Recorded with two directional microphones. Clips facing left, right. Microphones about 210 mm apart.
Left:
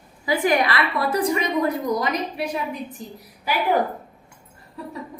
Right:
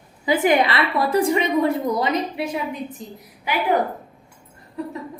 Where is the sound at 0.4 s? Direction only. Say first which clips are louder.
Right 2 dB; 25° right (ahead or behind).